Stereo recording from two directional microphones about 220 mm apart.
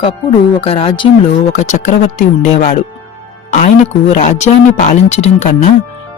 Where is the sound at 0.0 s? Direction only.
25° left (ahead or behind).